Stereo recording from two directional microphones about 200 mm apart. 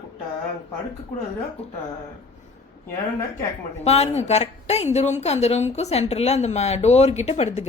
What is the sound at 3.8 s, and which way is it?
A woman's voice, 30° left (ahead or behind).